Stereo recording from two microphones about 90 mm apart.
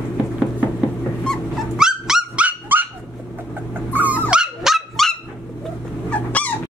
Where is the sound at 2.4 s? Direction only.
20° right (ahead or behind).